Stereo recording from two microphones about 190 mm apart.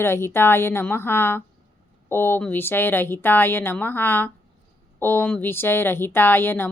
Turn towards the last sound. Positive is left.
turn(degrees=10)  # may be behind; listen again after turning